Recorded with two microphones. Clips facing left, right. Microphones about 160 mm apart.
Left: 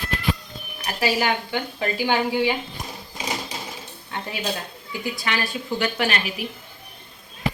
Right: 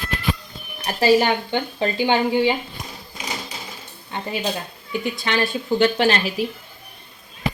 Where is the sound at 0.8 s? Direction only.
30° right (ahead or behind).